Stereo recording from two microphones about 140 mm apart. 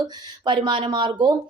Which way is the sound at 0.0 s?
35° right (ahead or behind).